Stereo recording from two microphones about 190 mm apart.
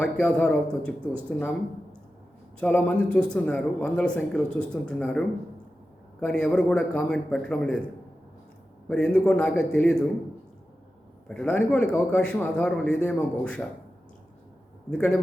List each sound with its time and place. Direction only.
0.0 s speech: 5° left (ahead or behind)
8.9 s speech: 5° left (ahead or behind)
11.3 s speech: 5° left (ahead or behind)
14.8 s speech: 5° left (ahead or behind)